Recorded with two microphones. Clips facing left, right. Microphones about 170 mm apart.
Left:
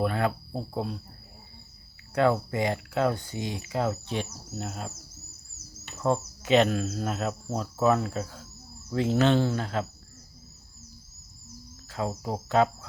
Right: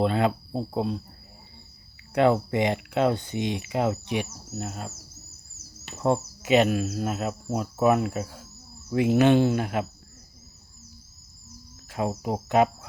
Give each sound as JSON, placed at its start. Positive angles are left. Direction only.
{"t": 0.0, "sound": "speech", "side_deg": -20}
{"t": 2.1, "sound": "speech", "side_deg": -20}
{"t": 6.0, "sound": "speech", "side_deg": -20}
{"t": 6.4, "sound": "speech", "side_deg": -10}
{"t": 11.9, "sound": "speech", "side_deg": -15}